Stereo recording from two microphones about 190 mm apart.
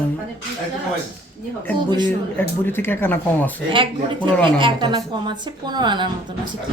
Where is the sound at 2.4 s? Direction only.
10° left (ahead or behind).